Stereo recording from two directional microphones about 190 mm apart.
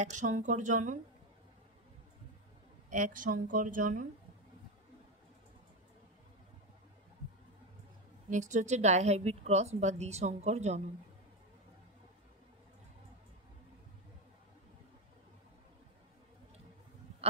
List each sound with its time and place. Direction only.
0.0 s a woman's voice: 40° right (ahead or behind)
2.9 s a woman's voice: 45° right (ahead or behind)
8.3 s a woman's voice: 40° right (ahead or behind)